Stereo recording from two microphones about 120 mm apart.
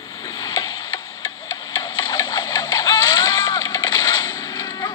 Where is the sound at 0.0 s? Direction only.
30° left (ahead or behind).